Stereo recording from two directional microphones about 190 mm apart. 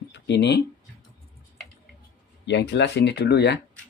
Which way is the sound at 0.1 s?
65° left (ahead or behind).